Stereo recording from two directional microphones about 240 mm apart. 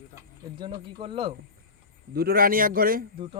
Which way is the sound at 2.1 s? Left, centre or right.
Right.